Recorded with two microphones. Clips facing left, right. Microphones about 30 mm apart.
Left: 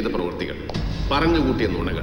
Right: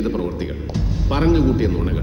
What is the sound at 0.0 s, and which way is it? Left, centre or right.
Music, left.